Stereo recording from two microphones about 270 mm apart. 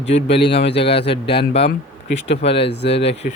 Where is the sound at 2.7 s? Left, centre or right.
Left.